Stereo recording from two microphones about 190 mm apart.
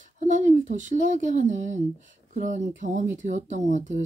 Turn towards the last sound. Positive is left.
turn(degrees=-40)  # may be behind; listen again after turning